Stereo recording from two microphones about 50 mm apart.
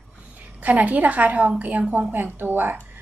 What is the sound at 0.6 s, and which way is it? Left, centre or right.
A woman's voice, right.